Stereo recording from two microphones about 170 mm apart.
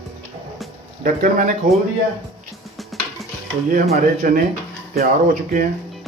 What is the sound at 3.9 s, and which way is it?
Speech, 50° right (ahead or behind).